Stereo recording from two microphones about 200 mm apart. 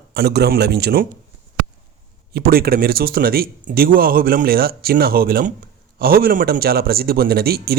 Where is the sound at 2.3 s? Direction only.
50° right (ahead or behind).